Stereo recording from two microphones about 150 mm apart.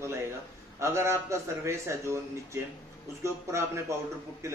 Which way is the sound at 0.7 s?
20° right (ahead or behind).